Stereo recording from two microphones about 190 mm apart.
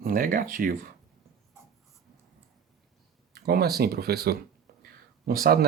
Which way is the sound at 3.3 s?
55° right (ahead or behind).